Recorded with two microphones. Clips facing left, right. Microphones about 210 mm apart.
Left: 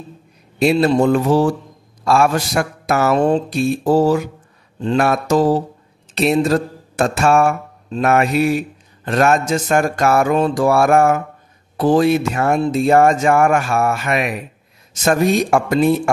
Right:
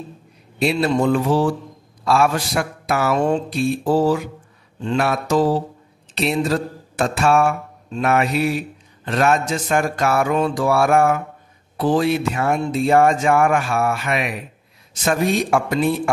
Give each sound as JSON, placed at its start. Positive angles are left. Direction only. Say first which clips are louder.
{"t": 0.6, "sound": "mantra", "louder": "left 4 dB", "side_deg": 45}